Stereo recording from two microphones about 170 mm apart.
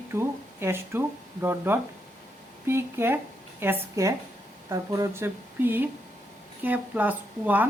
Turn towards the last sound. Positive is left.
turn(degrees=-10)  # may be behind; listen again after turning